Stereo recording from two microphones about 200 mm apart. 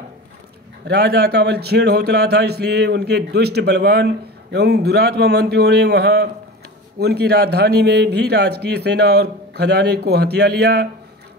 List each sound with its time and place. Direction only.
0.8 s a man's voice: 50° right (ahead or behind)